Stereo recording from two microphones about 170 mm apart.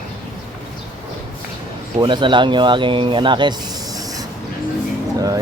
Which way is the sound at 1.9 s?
30° right (ahead or behind).